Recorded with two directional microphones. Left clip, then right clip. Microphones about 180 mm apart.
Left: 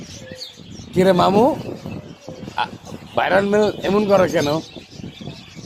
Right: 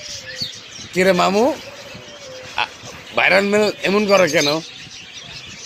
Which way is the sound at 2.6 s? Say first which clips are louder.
Right 1 dB; 15° left (ahead or behind).